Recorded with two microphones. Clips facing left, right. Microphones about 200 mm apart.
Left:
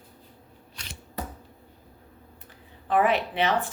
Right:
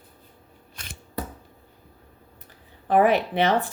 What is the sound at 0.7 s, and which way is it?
Scissors, 50° right (ahead or behind).